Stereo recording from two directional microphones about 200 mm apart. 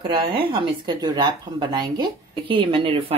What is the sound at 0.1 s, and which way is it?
A woman's voice, 25° right (ahead or behind).